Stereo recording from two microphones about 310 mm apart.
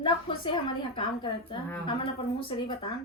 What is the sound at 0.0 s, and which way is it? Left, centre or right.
Speech, centre.